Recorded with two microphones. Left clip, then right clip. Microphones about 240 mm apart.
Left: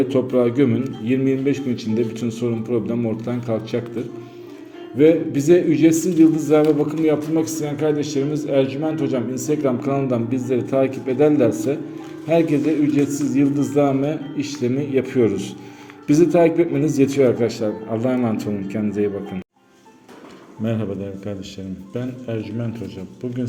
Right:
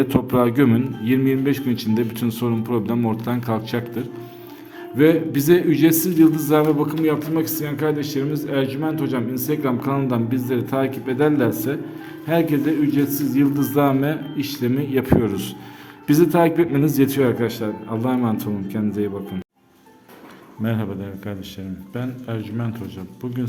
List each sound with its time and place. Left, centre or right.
0.0 s a man's voice: right
4.9 s a man's voice: right
21.9 s a man's voice: centre